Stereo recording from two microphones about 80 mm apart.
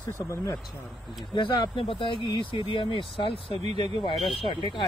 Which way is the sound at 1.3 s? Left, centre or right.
Left.